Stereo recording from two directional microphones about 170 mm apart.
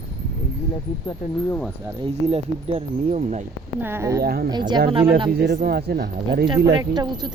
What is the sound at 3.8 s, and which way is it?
Speech, 15° right (ahead or behind).